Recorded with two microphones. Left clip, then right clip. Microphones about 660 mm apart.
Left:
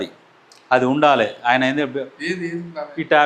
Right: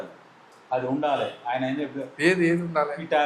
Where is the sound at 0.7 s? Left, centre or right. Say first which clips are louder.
Left 10 dB; left.